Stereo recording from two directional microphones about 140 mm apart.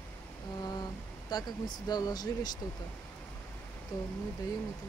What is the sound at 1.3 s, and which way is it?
Speech, 30° left (ahead or behind).